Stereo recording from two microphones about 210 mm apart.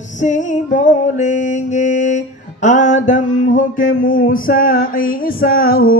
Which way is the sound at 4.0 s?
40° left (ahead or behind).